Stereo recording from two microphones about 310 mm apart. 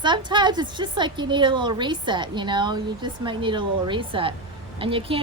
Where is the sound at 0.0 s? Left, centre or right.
Centre.